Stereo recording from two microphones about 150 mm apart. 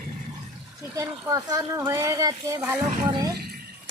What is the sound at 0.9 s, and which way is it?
Speech, 20° right (ahead or behind).